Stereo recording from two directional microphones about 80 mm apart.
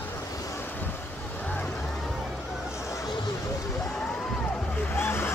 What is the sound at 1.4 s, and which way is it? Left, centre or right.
Vehicle, centre.